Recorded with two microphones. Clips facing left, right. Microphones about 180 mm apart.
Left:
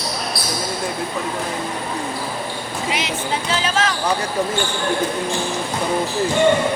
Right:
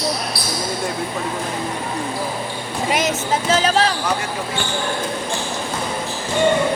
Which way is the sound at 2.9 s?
45° right (ahead or behind).